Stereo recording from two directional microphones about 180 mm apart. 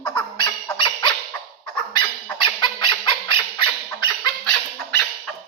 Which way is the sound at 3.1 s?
25° left (ahead or behind).